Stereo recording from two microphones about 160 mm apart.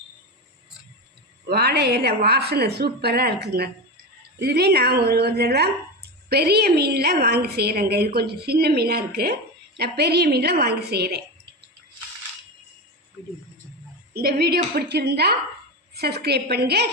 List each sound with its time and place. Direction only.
1.5 s a woman's voice: 90° right
9.7 s a woman's voice: 90° right
14.1 s a woman's voice: 75° right (ahead or behind); by 16.9 s 90° right